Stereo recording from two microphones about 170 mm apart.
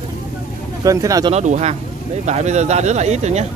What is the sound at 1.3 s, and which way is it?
Speech, 40° right (ahead or behind).